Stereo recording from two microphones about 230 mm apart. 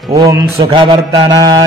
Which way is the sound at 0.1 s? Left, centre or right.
Centre.